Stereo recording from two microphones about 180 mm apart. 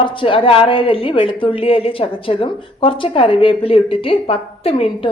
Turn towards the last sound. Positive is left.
turn(degrees=30)  # may be behind; listen again after turning